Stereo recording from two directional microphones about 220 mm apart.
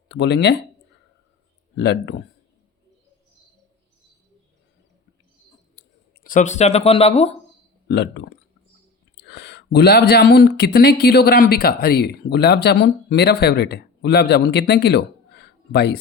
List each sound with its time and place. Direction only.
0.1 s speech: 50° left (ahead or behind)
1.7 s speech: 50° left (ahead or behind)
6.2 s speech: 35° left (ahead or behind)
7.9 s speech: 50° left (ahead or behind)